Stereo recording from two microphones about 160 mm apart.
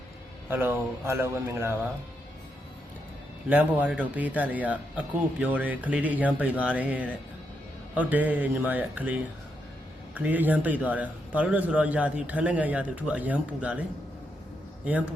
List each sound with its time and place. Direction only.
0.5 s a man's voice: 15° right (ahead or behind)
3.5 s a man's voice: 10° right (ahead or behind)
10.2 s a man's voice: 10° right (ahead or behind)